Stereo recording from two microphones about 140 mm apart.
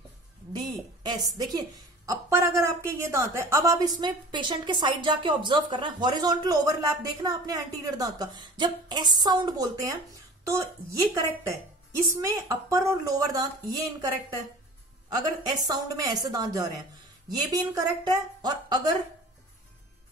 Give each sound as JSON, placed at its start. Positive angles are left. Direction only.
{"t": 0.5, "sound": "a woman's voice", "side_deg": -30}
{"t": 15.6, "sound": "a woman's voice", "side_deg": -25}